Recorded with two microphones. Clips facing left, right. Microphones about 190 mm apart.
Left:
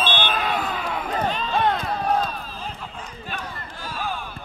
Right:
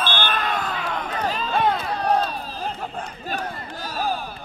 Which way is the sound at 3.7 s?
40° right (ahead or behind).